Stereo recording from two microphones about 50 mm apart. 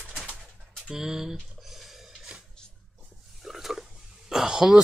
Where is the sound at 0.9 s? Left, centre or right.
Centre.